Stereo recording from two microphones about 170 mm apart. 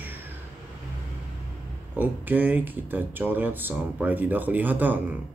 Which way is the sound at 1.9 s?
10° right (ahead or behind).